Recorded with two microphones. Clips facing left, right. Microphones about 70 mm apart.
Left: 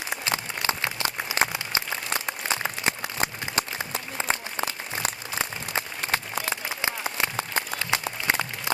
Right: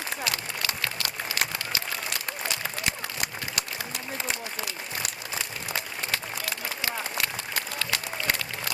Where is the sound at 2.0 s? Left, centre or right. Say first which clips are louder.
Left 3 dB; left.